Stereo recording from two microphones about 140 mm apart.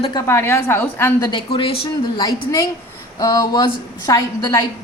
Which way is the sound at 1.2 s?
25° left (ahead or behind).